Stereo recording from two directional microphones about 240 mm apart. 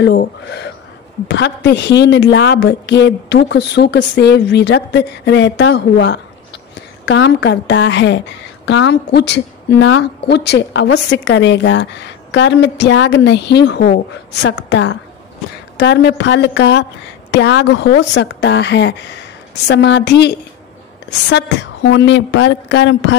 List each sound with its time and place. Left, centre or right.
0.0 s a woman's voice: left
21.9 s a woman's voice: left